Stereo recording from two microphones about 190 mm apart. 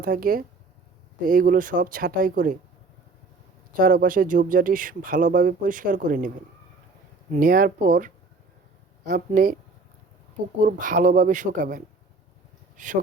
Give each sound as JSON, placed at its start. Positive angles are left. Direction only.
{"t": 0.0, "sound": "speech", "side_deg": -50}
{"t": 3.8, "sound": "speech", "side_deg": -50}
{"t": 10.6, "sound": "speech", "side_deg": -45}